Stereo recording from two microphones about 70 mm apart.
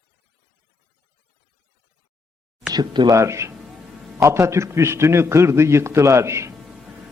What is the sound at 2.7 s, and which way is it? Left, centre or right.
Speech, right.